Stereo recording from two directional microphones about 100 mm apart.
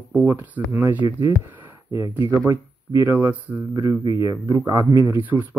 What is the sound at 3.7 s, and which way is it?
Speech, 35° right (ahead or behind).